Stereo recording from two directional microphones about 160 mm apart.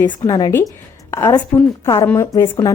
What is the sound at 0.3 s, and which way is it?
A woman's voice, 25° left (ahead or behind).